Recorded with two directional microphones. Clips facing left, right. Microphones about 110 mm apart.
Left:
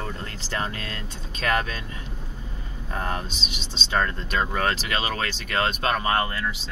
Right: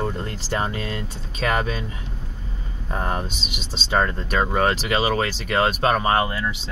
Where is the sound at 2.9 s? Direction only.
15° right (ahead or behind).